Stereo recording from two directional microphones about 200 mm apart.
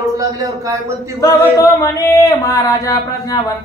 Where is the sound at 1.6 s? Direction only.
15° left (ahead or behind).